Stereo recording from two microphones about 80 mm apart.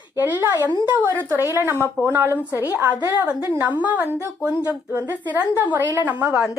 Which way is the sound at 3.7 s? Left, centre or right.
Centre.